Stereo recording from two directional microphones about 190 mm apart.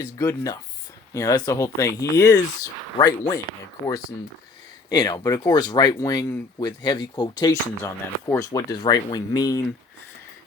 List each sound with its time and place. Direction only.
0.0 s speech: 15° left (ahead or behind)
4.9 s speech: 20° left (ahead or behind)